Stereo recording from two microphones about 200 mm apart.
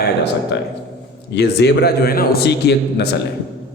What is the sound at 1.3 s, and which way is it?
A man's voice, 55° left (ahead or behind).